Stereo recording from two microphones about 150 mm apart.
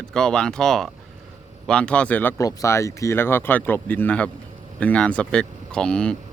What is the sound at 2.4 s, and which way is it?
Speech, 20° left (ahead or behind).